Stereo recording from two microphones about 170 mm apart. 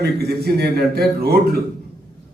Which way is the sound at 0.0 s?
70° right (ahead or behind).